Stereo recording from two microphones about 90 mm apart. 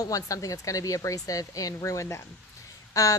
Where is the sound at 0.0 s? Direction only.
40° left (ahead or behind).